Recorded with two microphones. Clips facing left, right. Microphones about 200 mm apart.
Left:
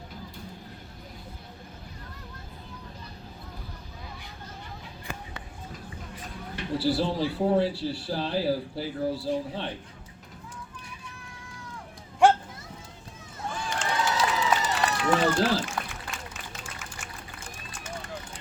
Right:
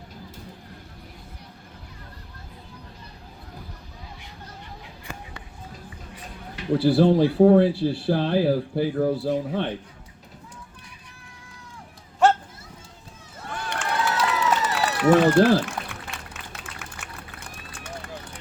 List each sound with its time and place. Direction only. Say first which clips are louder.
6.7 s speech: right 9 dB; 55° right (ahead or behind)
13.4 s run: right 1 dB; 65° right (ahead or behind)